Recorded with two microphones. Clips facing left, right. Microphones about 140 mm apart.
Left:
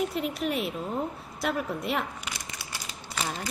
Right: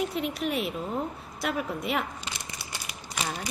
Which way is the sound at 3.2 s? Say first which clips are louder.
Even; 15° right (ahead or behind).